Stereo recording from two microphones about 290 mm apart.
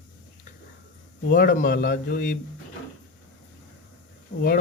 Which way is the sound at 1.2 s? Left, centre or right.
Left.